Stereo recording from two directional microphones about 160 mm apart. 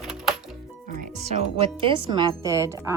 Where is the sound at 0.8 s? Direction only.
50° right (ahead or behind).